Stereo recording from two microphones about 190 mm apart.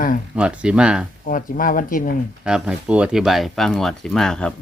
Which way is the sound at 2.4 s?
5° right (ahead or behind).